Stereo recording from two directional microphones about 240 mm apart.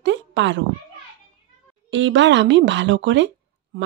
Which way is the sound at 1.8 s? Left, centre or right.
Right.